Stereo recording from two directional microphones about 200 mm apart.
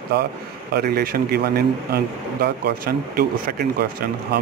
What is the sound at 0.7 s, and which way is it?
Speech, 50° right (ahead or behind).